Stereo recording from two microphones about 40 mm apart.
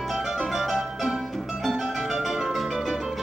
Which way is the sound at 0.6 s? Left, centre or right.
Centre.